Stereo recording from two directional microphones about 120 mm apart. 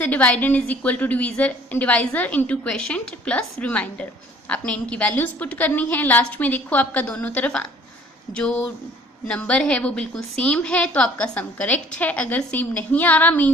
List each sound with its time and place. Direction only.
0.0 s a woman's voice: 10° left (ahead or behind)